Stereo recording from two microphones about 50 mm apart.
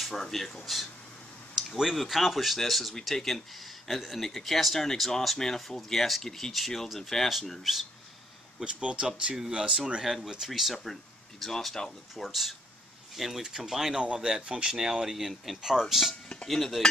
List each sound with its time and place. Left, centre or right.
0.0 s speech: centre
8.5 s speech: centre
14.0 s speech: right; by 16.8 s centre